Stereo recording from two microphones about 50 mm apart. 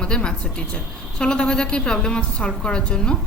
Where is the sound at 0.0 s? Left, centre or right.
Centre.